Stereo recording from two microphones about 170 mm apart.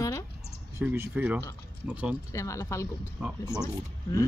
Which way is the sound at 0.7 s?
15° right (ahead or behind).